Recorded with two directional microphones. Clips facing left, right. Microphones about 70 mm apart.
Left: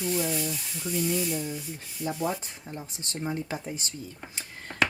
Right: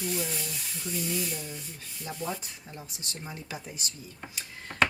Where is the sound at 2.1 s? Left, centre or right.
Left.